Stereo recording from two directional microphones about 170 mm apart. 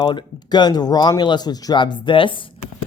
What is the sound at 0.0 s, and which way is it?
Speech, 30° left (ahead or behind).